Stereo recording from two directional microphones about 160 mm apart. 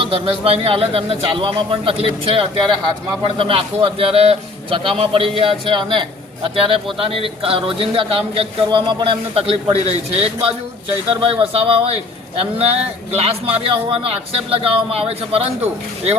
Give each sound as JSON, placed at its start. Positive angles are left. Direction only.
{"t": 0.0, "sound": "speech", "side_deg": -35}